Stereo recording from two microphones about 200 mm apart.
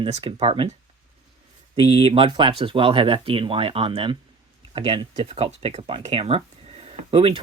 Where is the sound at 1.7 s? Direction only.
30° right (ahead or behind).